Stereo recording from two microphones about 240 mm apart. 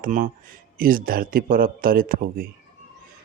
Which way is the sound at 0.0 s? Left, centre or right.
Right.